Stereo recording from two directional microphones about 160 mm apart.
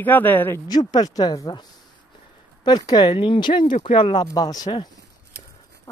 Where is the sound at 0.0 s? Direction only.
10° left (ahead or behind).